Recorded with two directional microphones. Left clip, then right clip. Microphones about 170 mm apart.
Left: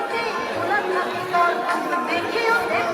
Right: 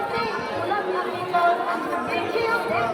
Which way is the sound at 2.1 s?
Centre (ahead or behind).